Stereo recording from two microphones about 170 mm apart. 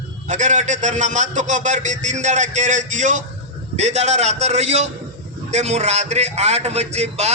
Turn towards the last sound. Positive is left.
turn(degrees=-40)  # may be behind; listen again after turning